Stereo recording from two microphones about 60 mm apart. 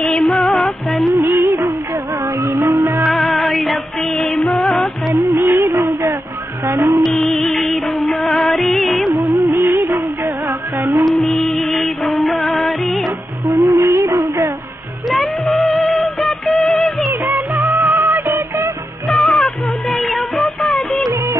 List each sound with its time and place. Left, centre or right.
0.0 s music: centre
1.1 s music: right
2.6 s music: right
3.1 s music: centre
5.1 s music: right
6.7 s music: right
7.0 s music: centre
9.3 s music: right
11.1 s music: centre
13.6 s music: right
15.0 s music: centre
17.3 s music: right
19.0 s music: centre